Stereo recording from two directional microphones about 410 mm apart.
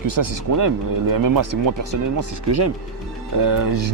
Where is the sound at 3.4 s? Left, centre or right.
Right.